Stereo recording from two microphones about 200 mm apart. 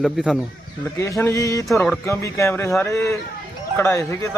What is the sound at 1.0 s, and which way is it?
Speech, 15° left (ahead or behind).